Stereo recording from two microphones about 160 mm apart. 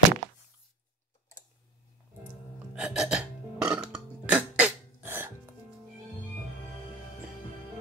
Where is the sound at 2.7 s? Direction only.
5° right (ahead or behind).